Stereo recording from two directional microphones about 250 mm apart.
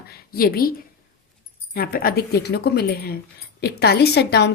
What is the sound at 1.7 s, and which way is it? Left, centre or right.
A woman's voice, left.